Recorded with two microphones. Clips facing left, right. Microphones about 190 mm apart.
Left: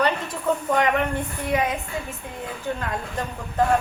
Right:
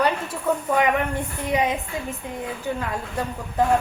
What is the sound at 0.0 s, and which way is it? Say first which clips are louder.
A woman's voice: even; 10° right (ahead or behind).